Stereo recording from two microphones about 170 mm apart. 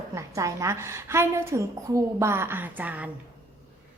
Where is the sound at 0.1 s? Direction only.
20° right (ahead or behind).